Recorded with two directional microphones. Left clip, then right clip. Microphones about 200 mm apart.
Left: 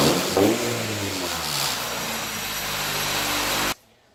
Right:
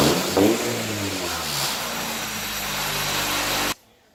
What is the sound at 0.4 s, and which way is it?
Vehicle, 25° right (ahead or behind).